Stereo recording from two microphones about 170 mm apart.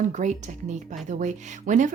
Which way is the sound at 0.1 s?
45° right (ahead or behind).